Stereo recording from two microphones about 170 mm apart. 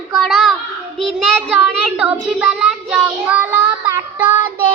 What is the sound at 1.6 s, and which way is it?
Speech, 5° right (ahead or behind).